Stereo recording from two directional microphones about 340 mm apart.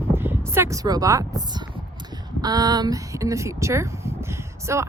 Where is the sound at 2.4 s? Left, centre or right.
Centre.